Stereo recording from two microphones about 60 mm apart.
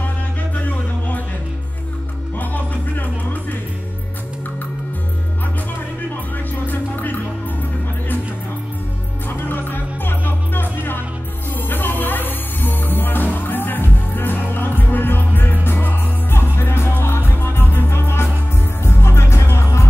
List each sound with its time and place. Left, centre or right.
0.6 s music: left
2.3 s music: left
6.5 s music: left
9.3 s music: left